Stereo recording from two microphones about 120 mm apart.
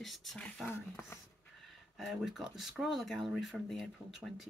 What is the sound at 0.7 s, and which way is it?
Speech, 20° left (ahead or behind).